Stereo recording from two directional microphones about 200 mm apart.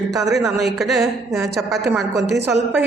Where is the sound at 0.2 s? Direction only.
Centre (ahead or behind).